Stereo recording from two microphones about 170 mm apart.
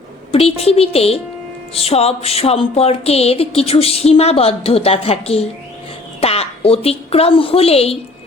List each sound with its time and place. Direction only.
0.3 s music: 35° left (ahead or behind)
6.1 s a woman's voice: 35° left (ahead or behind)